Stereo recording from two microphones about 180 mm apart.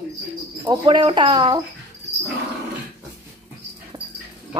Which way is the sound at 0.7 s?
25° right (ahead or behind).